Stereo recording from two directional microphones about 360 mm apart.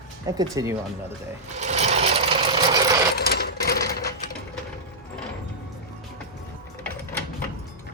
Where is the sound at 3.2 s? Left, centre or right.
Left.